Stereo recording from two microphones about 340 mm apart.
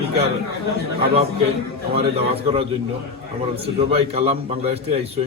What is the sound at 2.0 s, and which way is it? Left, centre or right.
Speech, centre.